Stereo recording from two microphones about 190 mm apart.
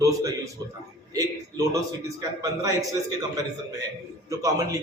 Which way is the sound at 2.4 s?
20° right (ahead or behind).